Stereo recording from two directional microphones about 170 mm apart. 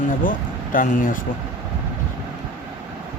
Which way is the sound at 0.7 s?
50° left (ahead or behind).